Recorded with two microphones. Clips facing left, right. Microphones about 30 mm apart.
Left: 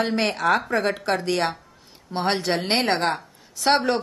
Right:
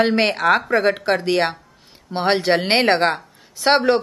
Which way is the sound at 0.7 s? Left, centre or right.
Centre.